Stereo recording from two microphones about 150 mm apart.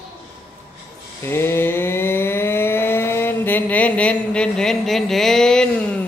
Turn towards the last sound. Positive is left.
turn(degrees=5)  # may be behind; listen again after turning